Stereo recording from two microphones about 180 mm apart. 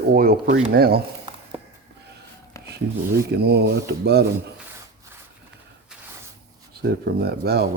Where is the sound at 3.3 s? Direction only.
65° right (ahead or behind).